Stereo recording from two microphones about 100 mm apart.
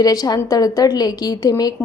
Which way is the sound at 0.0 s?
40° left (ahead or behind).